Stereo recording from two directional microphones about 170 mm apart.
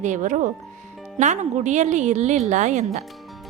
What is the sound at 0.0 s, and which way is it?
Speech, 45° right (ahead or behind).